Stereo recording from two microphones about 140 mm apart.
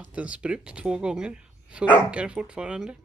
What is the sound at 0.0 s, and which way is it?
Speech, 10° right (ahead or behind).